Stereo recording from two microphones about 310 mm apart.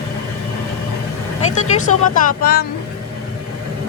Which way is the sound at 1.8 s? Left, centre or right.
Left.